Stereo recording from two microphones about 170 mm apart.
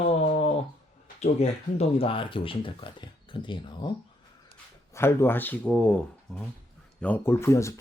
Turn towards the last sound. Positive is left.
turn(degrees=15)  # may be behind; listen again after turning